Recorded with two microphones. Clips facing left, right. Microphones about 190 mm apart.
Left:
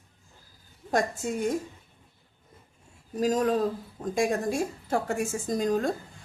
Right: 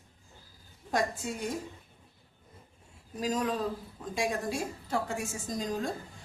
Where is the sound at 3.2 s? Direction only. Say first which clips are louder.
Left 6 dB; 45° left (ahead or behind).